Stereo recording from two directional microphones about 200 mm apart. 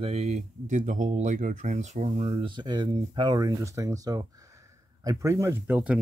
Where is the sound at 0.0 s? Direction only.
30° right (ahead or behind).